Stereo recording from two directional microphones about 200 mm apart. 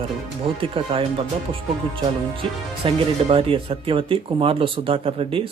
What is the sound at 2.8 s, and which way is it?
Speech, 25° right (ahead or behind).